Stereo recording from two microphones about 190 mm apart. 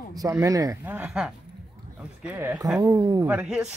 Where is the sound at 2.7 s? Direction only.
20° right (ahead or behind).